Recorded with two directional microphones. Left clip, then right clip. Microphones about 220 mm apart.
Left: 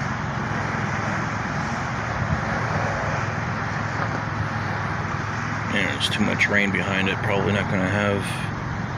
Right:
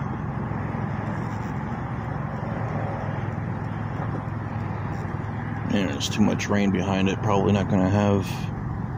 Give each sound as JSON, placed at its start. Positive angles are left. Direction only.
{"t": 5.7, "sound": "speech", "side_deg": -20}